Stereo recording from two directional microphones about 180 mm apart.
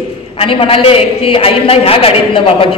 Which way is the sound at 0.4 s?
30° left (ahead or behind).